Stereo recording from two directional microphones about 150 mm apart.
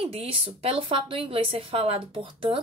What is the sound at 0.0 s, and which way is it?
A woman's voice, 40° right (ahead or behind).